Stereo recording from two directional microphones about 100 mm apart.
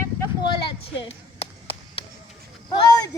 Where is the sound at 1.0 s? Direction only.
70° left (ahead or behind).